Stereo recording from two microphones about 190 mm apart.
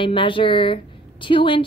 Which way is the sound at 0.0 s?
25° left (ahead or behind).